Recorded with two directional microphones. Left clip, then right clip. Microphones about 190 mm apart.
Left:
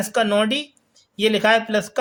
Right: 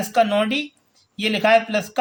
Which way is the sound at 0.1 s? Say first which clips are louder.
Right 1 dB; 30° left (ahead or behind).